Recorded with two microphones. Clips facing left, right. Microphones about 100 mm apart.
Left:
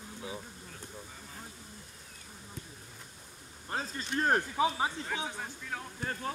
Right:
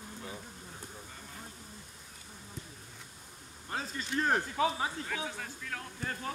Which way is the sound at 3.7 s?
35° left (ahead or behind).